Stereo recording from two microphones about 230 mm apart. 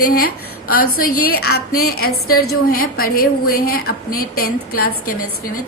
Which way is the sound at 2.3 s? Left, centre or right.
Left.